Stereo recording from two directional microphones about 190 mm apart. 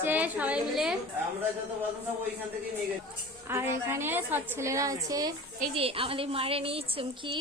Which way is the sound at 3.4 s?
15° right (ahead or behind).